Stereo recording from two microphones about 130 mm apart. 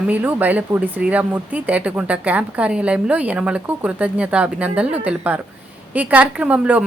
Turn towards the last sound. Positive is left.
turn(degrees=-10)  # may be behind; listen again after turning